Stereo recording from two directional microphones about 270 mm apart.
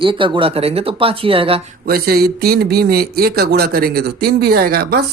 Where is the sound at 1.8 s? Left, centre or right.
Right.